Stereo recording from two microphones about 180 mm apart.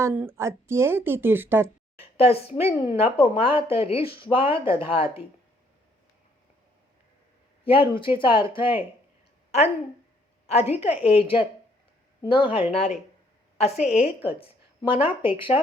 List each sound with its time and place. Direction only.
0.0 s a woman's voice: 10° right (ahead or behind)
2.0 s a woman's voice: 35° left (ahead or behind)
7.6 s a woman's voice: 30° left (ahead or behind)